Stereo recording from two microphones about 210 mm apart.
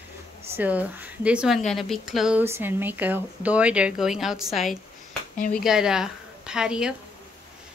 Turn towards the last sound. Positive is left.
turn(degrees=-5)  # may be behind; listen again after turning